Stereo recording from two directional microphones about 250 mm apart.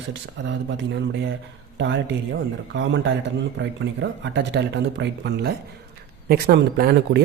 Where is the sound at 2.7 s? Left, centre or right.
Right.